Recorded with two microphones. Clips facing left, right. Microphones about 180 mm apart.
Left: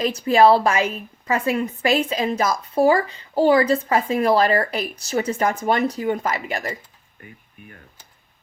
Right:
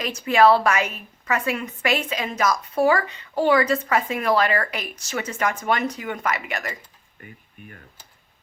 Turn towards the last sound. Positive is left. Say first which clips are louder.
# left 2 dB
turn(degrees=30)  # may be behind; listen again after turning